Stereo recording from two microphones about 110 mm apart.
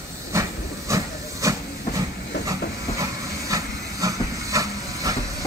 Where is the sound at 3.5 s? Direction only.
30° right (ahead or behind).